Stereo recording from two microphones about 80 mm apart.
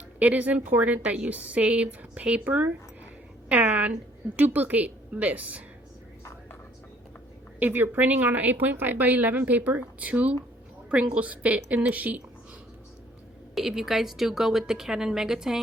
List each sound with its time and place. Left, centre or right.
0.2 s speech: centre
7.6 s speech: right
13.6 s a woman's voice: centre